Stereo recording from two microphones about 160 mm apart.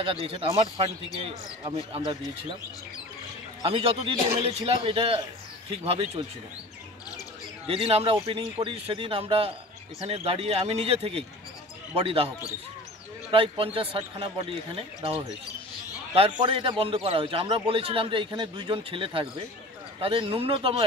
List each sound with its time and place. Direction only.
0.0 s a man's voice: 35° right (ahead or behind)
3.6 s a man's voice: 35° right (ahead or behind)
7.6 s a man's voice: 35° right (ahead or behind)
13.3 s a man's voice: 35° right (ahead or behind)